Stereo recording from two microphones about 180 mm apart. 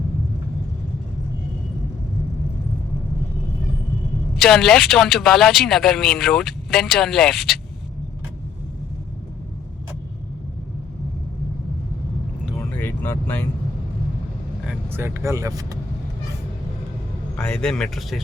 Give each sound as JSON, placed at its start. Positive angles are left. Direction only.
{"t": 4.4, "sound": "speech", "side_deg": 5}
{"t": 12.8, "sound": "vehicle", "side_deg": 10}
{"t": 14.7, "sound": "speech", "side_deg": -10}
{"t": 17.3, "sound": "speech", "side_deg": 5}